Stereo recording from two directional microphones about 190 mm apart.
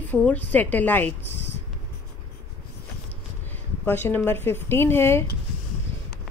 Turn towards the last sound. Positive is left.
turn(degrees=10)  # may be behind; listen again after turning